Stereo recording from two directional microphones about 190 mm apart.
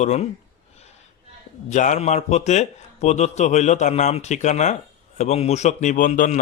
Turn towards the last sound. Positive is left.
turn(degrees=40)  # may be behind; listen again after turning